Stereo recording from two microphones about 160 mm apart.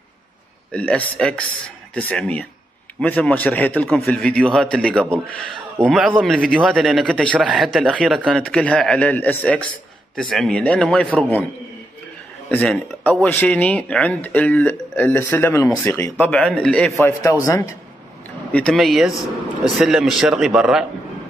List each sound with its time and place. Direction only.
0.7 s a man's voice: 10° left (ahead or behind)
12.4 s speech: 5° left (ahead or behind)
17.1 s a man's voice: 20° left (ahead or behind)
18.5 s a man's voice: 5° left (ahead or behind)